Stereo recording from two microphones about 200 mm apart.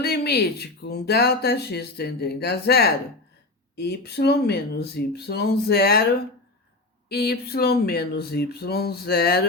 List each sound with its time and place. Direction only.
0.0 s speech: 55° left (ahead or behind)
7.1 s speech: 50° left (ahead or behind)